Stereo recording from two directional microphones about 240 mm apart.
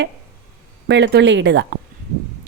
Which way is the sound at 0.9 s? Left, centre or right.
Right.